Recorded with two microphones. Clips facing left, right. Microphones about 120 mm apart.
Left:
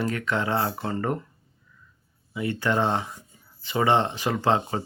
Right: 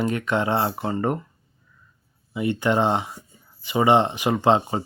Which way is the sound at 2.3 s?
20° right (ahead or behind).